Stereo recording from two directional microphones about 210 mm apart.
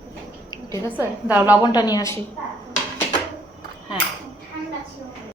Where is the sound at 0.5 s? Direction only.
20° left (ahead or behind).